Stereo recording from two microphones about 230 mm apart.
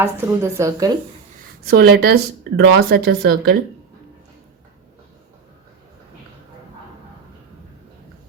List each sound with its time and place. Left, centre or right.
0.0 s a woman's voice: centre
1.6 s speech: right